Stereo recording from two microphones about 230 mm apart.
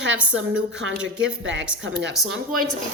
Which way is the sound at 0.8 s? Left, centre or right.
Right.